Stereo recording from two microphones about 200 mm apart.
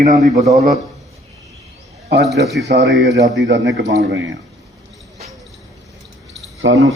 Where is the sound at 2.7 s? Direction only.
65° right (ahead or behind).